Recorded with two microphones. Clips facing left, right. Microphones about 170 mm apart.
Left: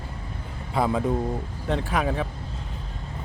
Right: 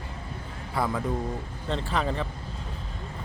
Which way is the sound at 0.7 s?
20° left (ahead or behind).